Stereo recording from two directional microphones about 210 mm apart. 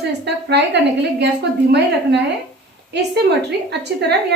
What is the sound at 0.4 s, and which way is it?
Speech, 55° right (ahead or behind).